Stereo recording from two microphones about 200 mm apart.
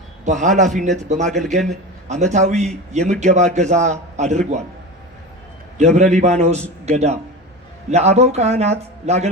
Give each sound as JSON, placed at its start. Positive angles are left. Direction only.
{"t": 0.3, "sound": "a man's voice", "side_deg": -35}
{"t": 5.7, "sound": "a man's voice", "side_deg": -35}